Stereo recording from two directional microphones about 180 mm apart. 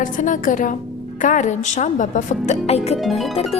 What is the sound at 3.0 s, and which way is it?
Speech, centre (ahead or behind).